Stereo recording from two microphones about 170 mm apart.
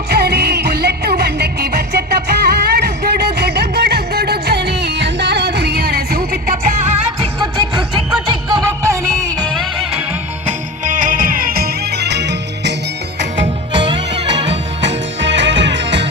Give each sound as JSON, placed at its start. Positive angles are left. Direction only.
{"t": 0.1, "sound": "music", "side_deg": -70}
{"t": 7.3, "sound": "music", "side_deg": -30}
{"t": 9.5, "sound": "music", "side_deg": 0}
{"t": 10.4, "sound": "music", "side_deg": -50}
{"t": 13.7, "sound": "music", "side_deg": -30}
{"t": 15.2, "sound": "music", "side_deg": -90}